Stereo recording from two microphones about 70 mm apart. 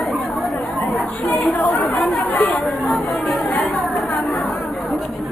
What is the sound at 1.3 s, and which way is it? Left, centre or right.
Chatter, centre.